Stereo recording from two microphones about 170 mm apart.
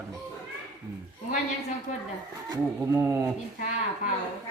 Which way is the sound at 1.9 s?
45° left (ahead or behind).